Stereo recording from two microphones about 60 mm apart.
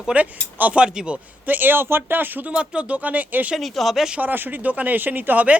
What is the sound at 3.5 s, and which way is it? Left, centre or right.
Speech, centre.